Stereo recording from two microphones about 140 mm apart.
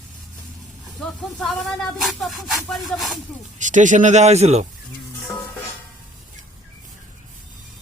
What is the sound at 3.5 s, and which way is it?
Speech, 60° right (ahead or behind).